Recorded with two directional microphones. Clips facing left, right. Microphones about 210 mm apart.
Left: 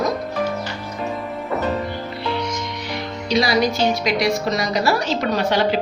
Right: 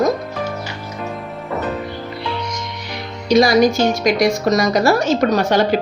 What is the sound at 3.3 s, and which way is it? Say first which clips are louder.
A woman's voice: right 6 dB; 45° right (ahead or behind).